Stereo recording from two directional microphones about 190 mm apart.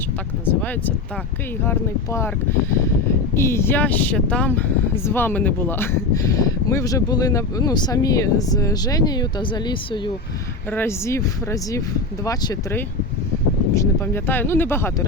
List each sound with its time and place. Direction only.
0.6 s speech: 10° left (ahead or behind)
10.7 s speech: 10° left (ahead or behind)